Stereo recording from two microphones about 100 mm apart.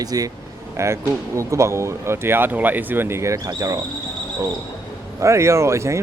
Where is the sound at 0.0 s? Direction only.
40° right (ahead or behind).